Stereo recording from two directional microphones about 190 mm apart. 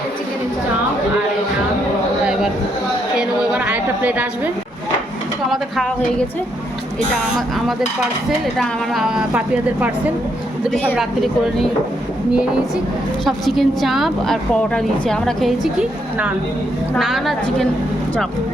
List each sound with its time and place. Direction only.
3.2 s a sound: 5° right (ahead or behind)
5.5 s a woman's voice: centre (ahead or behind)
7.3 s a woman's voice: centre (ahead or behind)
10.9 s a woman's voice: centre (ahead or behind)